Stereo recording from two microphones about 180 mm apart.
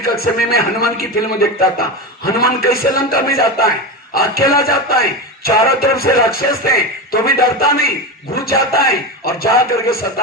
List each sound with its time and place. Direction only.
0.0 s a man's voice: 60° left (ahead or behind)